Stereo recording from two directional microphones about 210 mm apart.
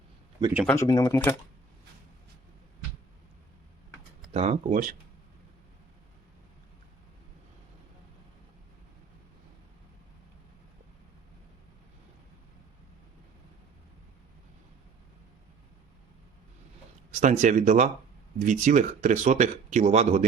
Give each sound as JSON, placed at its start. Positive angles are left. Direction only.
{"t": 0.7, "sound": "speech", "side_deg": 15}
{"t": 4.4, "sound": "speech", "side_deg": -35}
{"t": 17.1, "sound": "speech", "side_deg": -35}